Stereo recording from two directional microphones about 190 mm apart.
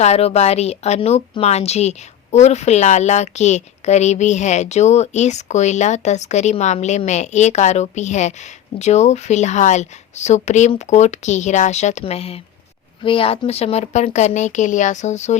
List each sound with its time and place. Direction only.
0.0 s a woman's voice: 35° left (ahead or behind)